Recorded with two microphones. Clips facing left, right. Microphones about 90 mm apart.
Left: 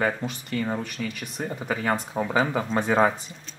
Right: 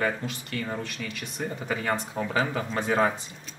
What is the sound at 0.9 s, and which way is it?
Speech, 5° left (ahead or behind).